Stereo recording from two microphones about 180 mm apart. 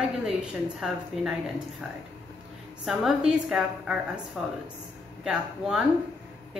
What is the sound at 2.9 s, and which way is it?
A woman's voice, 5° right (ahead or behind).